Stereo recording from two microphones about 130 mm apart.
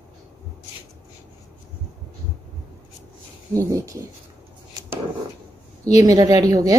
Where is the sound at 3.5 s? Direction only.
25° right (ahead or behind).